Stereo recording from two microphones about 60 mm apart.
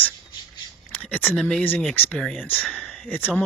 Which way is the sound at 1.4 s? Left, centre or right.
Centre.